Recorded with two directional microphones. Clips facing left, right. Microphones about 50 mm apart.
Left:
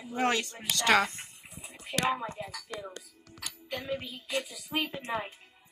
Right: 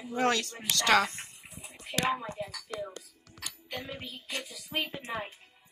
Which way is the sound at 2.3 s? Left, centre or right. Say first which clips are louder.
Right 1 dB; left.